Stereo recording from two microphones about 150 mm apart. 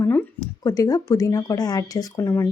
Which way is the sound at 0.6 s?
25° left (ahead or behind).